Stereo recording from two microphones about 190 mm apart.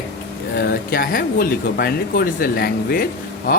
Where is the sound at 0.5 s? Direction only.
55° left (ahead or behind).